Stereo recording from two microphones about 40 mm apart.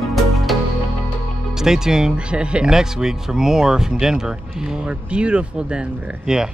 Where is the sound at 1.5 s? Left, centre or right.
Centre.